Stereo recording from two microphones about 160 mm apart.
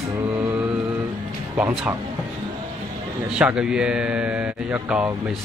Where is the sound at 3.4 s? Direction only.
5° right (ahead or behind).